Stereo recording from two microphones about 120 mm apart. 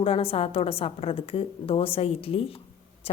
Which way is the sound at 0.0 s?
50° left (ahead or behind).